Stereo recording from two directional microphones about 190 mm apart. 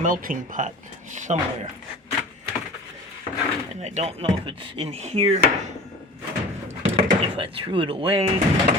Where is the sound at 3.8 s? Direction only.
35° right (ahead or behind).